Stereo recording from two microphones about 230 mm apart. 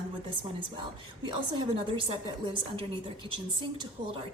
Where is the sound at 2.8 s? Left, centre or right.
Right.